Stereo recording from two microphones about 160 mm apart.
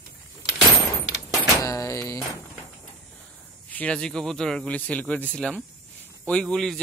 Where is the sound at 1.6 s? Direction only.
20° left (ahead or behind).